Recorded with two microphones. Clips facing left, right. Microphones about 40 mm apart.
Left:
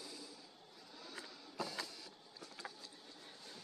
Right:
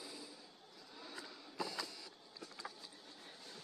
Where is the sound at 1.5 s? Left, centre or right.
Left.